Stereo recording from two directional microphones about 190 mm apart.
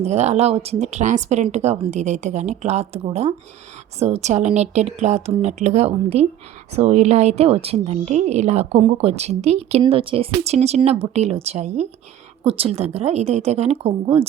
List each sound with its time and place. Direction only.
0.0 s a woman's voice: 35° right (ahead or behind)